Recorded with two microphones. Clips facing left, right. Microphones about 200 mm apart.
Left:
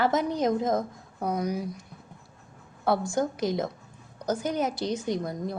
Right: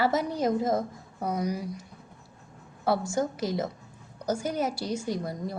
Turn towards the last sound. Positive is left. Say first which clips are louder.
# left 2 dB
turn(degrees=-5)  # may be behind; listen again after turning